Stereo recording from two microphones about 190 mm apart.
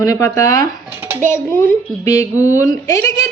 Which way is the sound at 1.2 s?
10° left (ahead or behind).